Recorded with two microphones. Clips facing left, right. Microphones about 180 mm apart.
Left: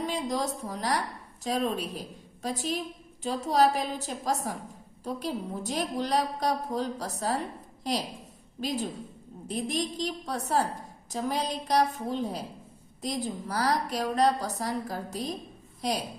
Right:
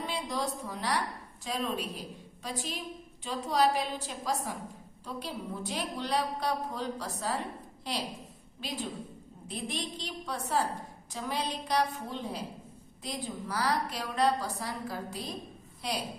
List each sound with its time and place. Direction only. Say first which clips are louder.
0.0 s a woman's voice: left 4 dB; 45° left (ahead or behind)